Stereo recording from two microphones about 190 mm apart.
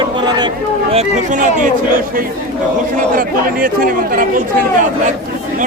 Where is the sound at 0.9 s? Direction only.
40° right (ahead or behind).